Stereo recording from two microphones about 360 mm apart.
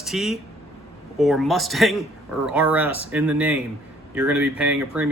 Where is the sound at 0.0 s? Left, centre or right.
Centre.